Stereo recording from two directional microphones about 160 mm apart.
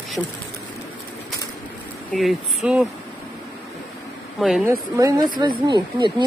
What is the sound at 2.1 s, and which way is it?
Speech, 5° right (ahead or behind).